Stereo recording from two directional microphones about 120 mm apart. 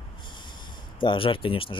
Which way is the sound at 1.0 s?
45° left (ahead or behind).